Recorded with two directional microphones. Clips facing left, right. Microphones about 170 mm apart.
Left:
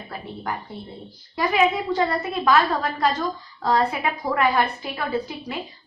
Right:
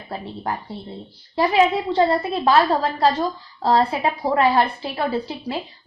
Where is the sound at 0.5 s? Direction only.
30° right (ahead or behind).